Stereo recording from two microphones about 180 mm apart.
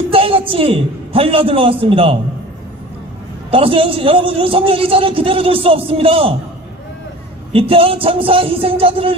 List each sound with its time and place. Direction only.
0.1 s a man's voice: 30° right (ahead or behind)
3.4 s a man's voice: 30° right (ahead or behind)
7.5 s a man's voice: 30° right (ahead or behind)